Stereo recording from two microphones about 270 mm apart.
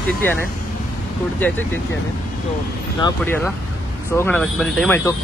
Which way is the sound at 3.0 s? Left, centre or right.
Centre.